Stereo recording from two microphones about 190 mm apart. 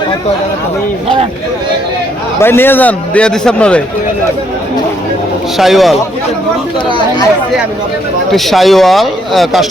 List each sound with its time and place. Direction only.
2.4 s a man's voice: 10° left (ahead or behind)
5.5 s speech: centre (ahead or behind)
6.8 s speech: 25° left (ahead or behind)
8.3 s speech: centre (ahead or behind)